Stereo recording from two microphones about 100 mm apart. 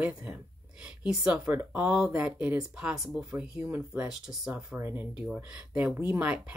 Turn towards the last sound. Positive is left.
turn(degrees=-15)  # may be behind; listen again after turning